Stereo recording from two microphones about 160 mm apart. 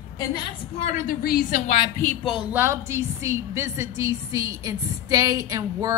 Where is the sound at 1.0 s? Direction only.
65° left (ahead or behind).